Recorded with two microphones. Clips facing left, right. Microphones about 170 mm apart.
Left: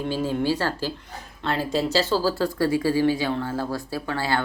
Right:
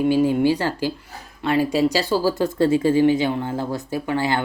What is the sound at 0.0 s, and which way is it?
Speech, 15° right (ahead or behind).